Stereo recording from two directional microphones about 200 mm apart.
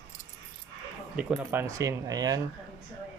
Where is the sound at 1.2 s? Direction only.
10° right (ahead or behind).